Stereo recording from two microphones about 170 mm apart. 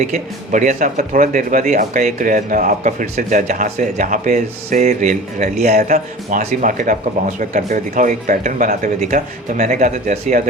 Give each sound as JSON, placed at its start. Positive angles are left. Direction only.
{"t": 0.0, "sound": "speech", "side_deg": -45}